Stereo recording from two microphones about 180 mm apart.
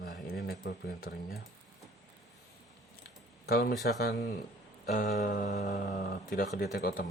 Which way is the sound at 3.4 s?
60° left (ahead or behind).